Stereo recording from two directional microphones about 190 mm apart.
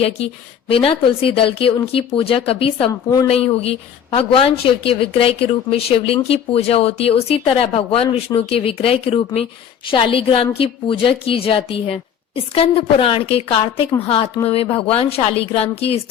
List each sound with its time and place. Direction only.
0.7 s speech: 30° left (ahead or behind)